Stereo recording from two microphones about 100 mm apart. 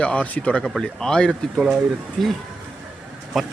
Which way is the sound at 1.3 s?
10° right (ahead or behind).